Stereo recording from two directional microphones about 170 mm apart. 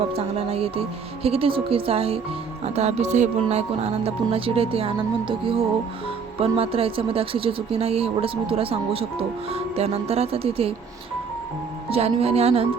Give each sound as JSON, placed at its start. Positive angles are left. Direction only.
{"t": 0.2, "sound": "speech", "side_deg": -35}
{"t": 11.9, "sound": "speech", "side_deg": -35}